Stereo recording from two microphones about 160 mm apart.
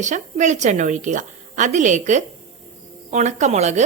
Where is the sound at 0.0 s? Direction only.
50° right (ahead or behind).